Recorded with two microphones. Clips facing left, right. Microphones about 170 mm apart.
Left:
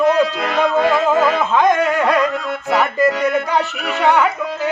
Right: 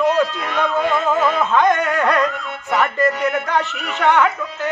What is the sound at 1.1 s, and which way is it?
Music, 75° left (ahead or behind).